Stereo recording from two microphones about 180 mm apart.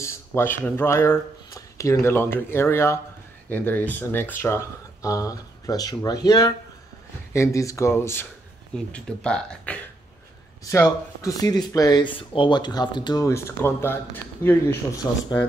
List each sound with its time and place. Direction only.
0.0 s speech: 15° left (ahead or behind)
10.6 s speech: 15° left (ahead or behind)